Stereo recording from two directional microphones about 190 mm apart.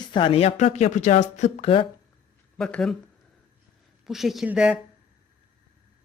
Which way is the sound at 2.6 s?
5° left (ahead or behind).